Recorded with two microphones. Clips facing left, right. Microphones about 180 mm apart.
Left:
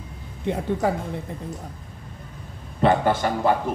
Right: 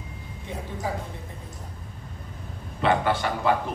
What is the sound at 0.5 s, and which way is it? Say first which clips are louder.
Speech: left 9 dB; 65° left (ahead or behind).